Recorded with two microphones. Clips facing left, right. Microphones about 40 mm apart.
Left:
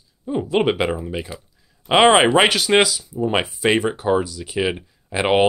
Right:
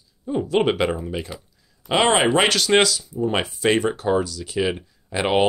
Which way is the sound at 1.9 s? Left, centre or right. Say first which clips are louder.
Left 5 dB; left.